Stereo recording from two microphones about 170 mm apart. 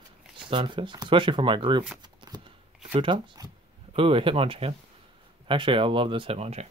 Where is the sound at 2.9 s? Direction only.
30° right (ahead or behind).